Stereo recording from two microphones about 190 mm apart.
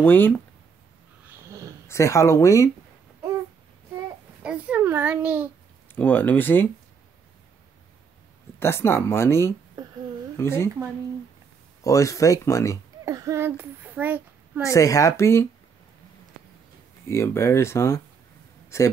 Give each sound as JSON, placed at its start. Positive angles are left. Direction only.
{"t": 0.0, "sound": "speech", "side_deg": 10}
{"t": 1.9, "sound": "speech", "side_deg": 15}
{"t": 3.9, "sound": "babbling", "side_deg": -5}
{"t": 5.9, "sound": "speech", "side_deg": 10}
{"t": 8.5, "sound": "speech", "side_deg": 15}
{"t": 11.8, "sound": "speech", "side_deg": 15}
{"t": 13.0, "sound": "a child's voice", "side_deg": -15}
{"t": 14.6, "sound": "speech", "side_deg": 15}
{"t": 17.1, "sound": "a man's voice", "side_deg": 15}